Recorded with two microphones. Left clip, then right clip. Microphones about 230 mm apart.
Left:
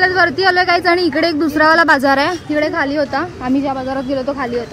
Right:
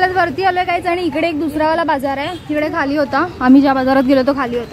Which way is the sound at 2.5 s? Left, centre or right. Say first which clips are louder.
Right 3 dB; centre.